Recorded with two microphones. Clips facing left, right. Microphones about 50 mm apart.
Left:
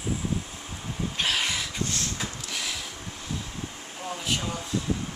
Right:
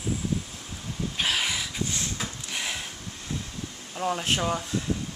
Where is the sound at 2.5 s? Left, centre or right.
Right.